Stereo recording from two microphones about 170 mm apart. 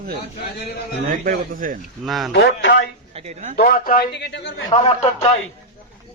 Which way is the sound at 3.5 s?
60° left (ahead or behind).